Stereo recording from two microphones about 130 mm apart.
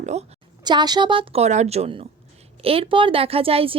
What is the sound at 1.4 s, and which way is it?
Speech, 60° right (ahead or behind).